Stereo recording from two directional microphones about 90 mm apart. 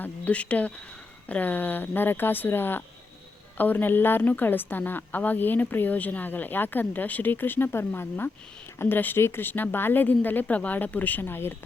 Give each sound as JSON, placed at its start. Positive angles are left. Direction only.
{"t": 0.0, "sound": "a woman's voice", "side_deg": 15}